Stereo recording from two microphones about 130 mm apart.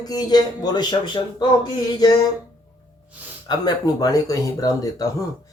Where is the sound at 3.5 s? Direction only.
30° left (ahead or behind).